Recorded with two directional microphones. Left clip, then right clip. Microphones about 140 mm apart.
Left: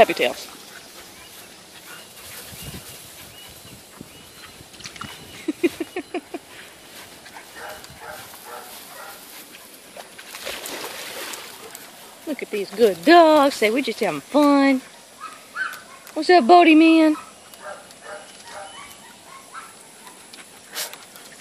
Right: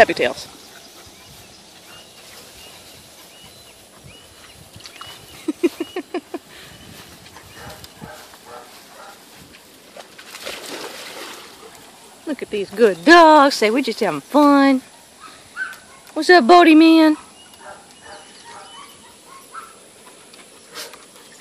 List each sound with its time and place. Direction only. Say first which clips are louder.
0.0 s speech: right 2 dB; 25° right (ahead or behind)
5.5 s a sound: right 2 dB; 25° right (ahead or behind)
9.9 s splash: right 1 dB; 80° right
12.3 s speech: right 2 dB; 25° right (ahead or behind)
16.2 s speech: right 3 dB; 30° right (ahead or behind)